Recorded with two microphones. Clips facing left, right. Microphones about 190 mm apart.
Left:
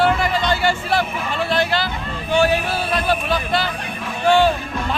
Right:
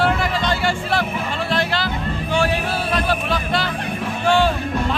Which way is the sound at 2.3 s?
Centre (ahead or behind).